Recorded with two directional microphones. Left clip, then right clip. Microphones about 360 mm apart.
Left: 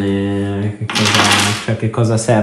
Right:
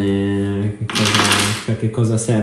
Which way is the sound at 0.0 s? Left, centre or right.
Centre.